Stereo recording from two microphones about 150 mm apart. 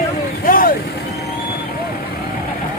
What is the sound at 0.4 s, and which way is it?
Vehicle, 70° left (ahead or behind).